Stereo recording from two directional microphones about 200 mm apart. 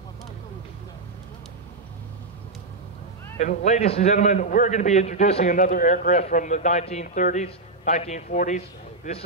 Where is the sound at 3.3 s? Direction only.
35° left (ahead or behind).